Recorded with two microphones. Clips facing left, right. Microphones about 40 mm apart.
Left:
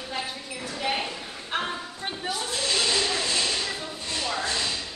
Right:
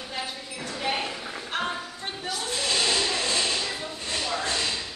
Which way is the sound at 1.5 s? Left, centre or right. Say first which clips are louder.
Left 1 dB; centre.